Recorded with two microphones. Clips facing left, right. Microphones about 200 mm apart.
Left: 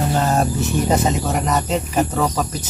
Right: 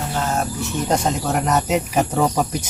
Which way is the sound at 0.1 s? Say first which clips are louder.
Left 3 dB; 35° left (ahead or behind).